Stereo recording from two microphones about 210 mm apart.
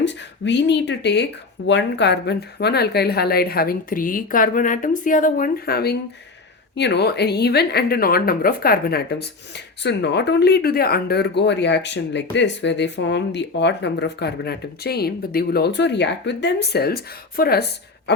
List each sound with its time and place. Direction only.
0.0 s speech: 55° left (ahead or behind)